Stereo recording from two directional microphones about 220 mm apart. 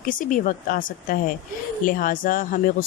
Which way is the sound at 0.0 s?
40° left (ahead or behind).